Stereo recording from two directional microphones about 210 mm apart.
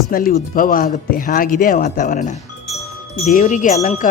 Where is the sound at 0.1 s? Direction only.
45° left (ahead or behind).